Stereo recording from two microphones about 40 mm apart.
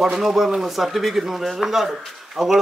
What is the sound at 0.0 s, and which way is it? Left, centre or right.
A man's voice, centre.